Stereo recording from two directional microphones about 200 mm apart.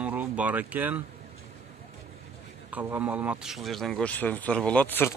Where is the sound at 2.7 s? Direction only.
10° right (ahead or behind); by 5.1 s 10° left (ahead or behind).